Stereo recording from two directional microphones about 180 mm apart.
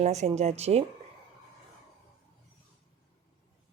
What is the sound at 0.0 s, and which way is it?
Speech, 40° right (ahead or behind).